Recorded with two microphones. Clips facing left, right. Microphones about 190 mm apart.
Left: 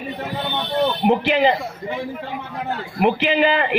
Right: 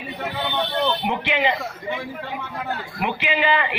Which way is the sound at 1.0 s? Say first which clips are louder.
Left 6 dB; 40° left (ahead or behind).